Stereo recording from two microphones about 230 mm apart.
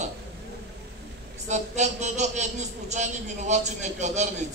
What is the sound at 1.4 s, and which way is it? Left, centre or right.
A man's voice, right.